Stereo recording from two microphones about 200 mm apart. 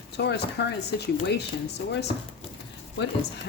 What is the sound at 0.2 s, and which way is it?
Speech, 55° left (ahead or behind).